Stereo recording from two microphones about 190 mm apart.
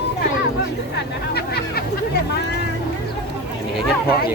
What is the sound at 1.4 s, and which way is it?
Hubbub, 55° left (ahead or behind).